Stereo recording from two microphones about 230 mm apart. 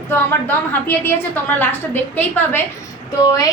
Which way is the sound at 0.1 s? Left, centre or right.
Centre.